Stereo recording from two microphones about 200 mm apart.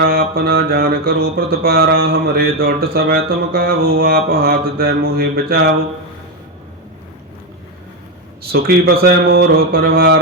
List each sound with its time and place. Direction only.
0.0 s speech: 50° right (ahead or behind)
8.4 s speech: 50° right (ahead or behind)